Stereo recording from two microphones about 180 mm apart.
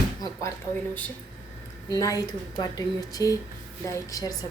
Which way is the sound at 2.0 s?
20° left (ahead or behind).